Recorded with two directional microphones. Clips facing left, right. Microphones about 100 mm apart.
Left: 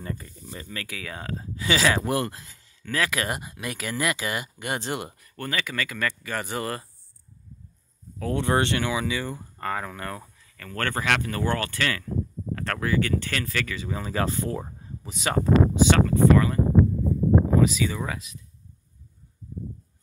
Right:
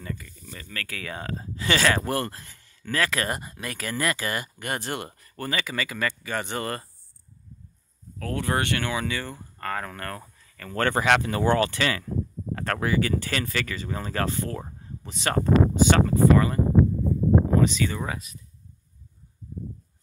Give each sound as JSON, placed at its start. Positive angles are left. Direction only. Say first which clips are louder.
{"t": 0.0, "sound": "speech", "louder": "left 1 dB", "side_deg": 35}
{"t": 0.7, "sound": "speech", "louder": "right 2 dB", "side_deg": 15}
{"t": 1.0, "sound": "speech", "louder": "right 1 dB", "side_deg": 0}
{"t": 5.2, "sound": "speech", "louder": "right 1 dB", "side_deg": -5}
{"t": 8.2, "sound": "speech", "louder": "left 3 dB", "side_deg": 20}
{"t": 10.2, "sound": "a sound", "louder": "right 2 dB", "side_deg": 0}
{"t": 10.7, "sound": "speech", "louder": "right 4 dB", "side_deg": -15}